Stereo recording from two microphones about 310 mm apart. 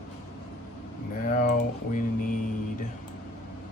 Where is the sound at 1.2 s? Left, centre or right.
Left.